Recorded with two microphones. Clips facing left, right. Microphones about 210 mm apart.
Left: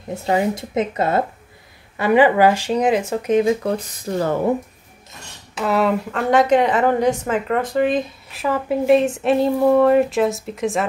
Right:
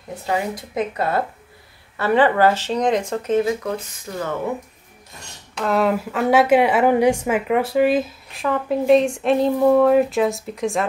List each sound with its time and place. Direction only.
0.1 s speech: 25° left (ahead or behind)
3.4 s speech: 35° left (ahead or behind)
5.5 s a woman's voice: 5° left (ahead or behind)